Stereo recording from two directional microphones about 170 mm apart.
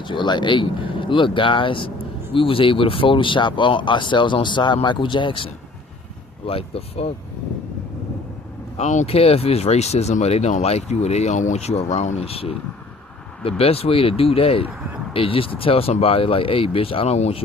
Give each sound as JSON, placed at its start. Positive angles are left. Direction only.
{"t": 0.0, "sound": "speech", "side_deg": 25}
{"t": 8.8, "sound": "speech", "side_deg": 45}